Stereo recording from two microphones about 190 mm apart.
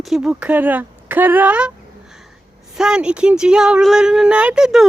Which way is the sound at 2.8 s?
5° right (ahead or behind).